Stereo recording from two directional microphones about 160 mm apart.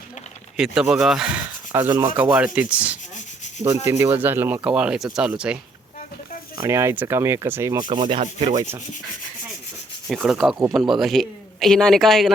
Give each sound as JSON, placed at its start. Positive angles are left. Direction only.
{"t": 0.5, "sound": "speech", "side_deg": -5}
{"t": 1.9, "sound": "sanding", "side_deg": -25}
{"t": 2.1, "sound": "speech", "side_deg": -10}
{"t": 6.6, "sound": "speech", "side_deg": -20}
{"t": 7.8, "sound": "sanding", "side_deg": -30}
{"t": 8.2, "sound": "rub", "side_deg": -35}
{"t": 10.1, "sound": "speech", "side_deg": -5}